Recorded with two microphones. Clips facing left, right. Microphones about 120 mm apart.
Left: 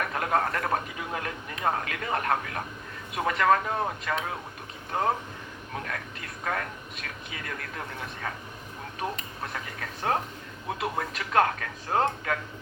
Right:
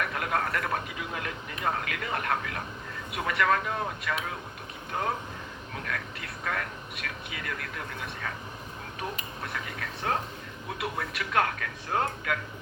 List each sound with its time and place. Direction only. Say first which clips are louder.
0.0 s speech: left 3 dB; 35° left (ahead or behind)
9.4 s speech: right 1 dB; 35° left (ahead or behind)